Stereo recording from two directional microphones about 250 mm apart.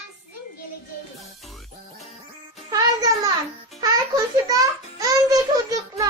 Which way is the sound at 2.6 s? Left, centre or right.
Centre.